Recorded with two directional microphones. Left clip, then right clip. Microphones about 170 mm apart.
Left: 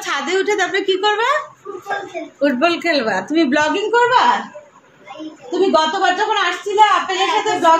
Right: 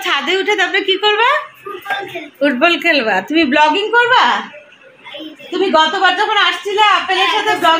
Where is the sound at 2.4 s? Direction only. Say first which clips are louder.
Right 4 dB; 20° right (ahead or behind).